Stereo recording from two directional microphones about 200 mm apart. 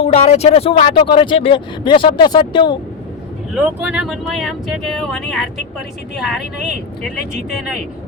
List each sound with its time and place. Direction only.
0.0 s speech: 30° left (ahead or behind)
3.5 s speech: 5° right (ahead or behind)